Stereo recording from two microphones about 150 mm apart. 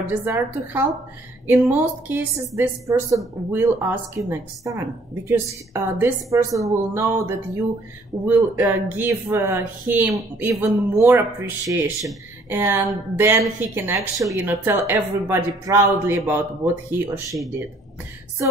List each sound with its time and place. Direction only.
0.0 s a woman's voice: 15° right (ahead or behind)